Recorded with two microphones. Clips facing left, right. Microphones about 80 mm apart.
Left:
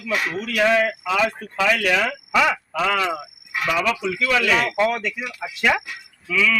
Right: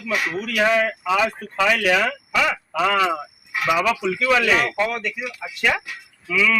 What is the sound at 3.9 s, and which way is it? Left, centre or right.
Speech, centre.